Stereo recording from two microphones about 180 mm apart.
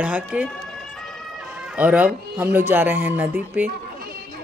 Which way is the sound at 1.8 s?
10° right (ahead or behind).